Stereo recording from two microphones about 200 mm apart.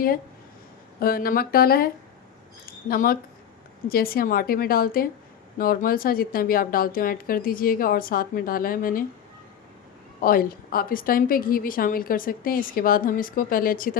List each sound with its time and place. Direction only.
0.9 s a woman's voice: 50° left (ahead or behind)
2.9 s a woman's voice: 45° left (ahead or behind)
10.2 s a woman's voice: 45° left (ahead or behind)